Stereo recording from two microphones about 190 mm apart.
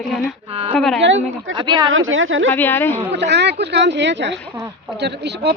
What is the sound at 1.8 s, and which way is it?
Speech, 90° right.